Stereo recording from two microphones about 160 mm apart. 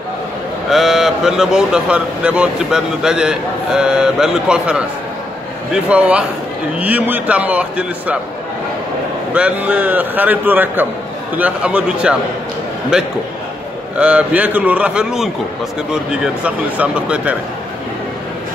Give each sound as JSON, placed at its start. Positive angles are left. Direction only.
{"t": 0.7, "sound": "a man's voice", "side_deg": 0}
{"t": 9.3, "sound": "a man's voice", "side_deg": -10}